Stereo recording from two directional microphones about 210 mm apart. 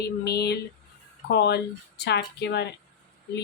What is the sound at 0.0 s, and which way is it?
A woman's voice, 50° left (ahead or behind).